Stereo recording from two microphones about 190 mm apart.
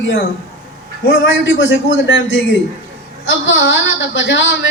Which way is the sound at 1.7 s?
75° left (ahead or behind).